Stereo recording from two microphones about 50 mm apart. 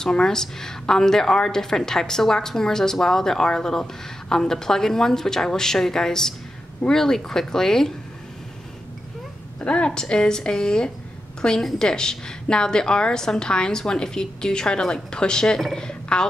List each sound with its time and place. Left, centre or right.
0.0 s a woman's voice: centre
9.6 s a woman's voice: left